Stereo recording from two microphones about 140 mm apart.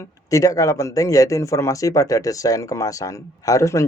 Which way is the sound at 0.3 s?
25° left (ahead or behind).